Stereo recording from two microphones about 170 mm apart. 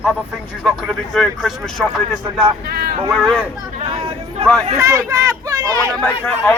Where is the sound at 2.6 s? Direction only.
65° right (ahead or behind).